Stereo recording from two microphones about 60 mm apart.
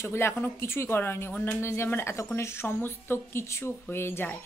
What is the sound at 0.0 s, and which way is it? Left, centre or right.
A woman's voice, left.